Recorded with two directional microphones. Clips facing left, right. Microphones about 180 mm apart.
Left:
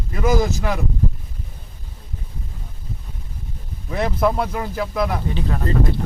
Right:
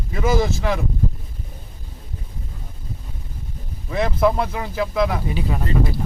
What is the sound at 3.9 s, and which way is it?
Speech, centre (ahead or behind).